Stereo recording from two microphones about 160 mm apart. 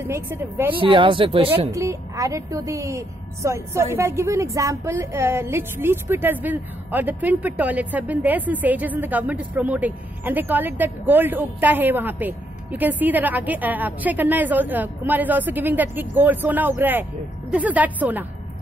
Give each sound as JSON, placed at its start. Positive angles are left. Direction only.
{"t": 0.0, "sound": "a woman's voice", "side_deg": -15}
{"t": 0.7, "sound": "speech", "side_deg": -30}
{"t": 1.7, "sound": "a woman's voice", "side_deg": -20}